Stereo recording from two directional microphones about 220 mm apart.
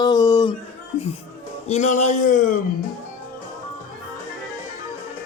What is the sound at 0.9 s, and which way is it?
Speech, 30° left (ahead or behind).